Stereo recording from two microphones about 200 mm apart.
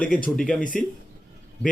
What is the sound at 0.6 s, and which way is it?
Speech, 40° left (ahead or behind).